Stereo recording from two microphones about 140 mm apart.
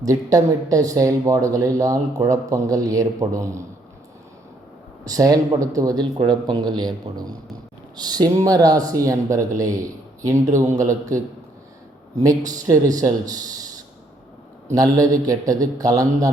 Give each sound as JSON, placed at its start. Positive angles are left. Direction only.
{"t": 0.0, "sound": "speech", "side_deg": -25}
{"t": 5.0, "sound": "speech", "side_deg": -25}
{"t": 12.2, "sound": "speech", "side_deg": -25}
{"t": 14.8, "sound": "speech", "side_deg": -25}